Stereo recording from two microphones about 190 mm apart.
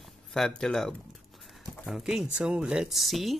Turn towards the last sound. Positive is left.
turn(degrees=0)  # may be behind; listen again after turning